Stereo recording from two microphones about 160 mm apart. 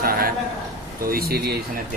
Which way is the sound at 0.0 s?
70° right (ahead or behind).